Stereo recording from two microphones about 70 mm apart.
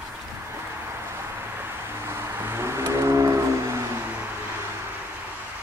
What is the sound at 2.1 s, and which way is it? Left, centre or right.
Vehicle, right.